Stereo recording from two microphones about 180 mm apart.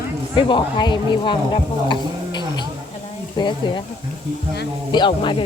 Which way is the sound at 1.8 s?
25° left (ahead or behind).